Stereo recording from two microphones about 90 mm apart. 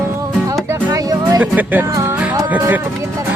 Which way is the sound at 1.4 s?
20° right (ahead or behind).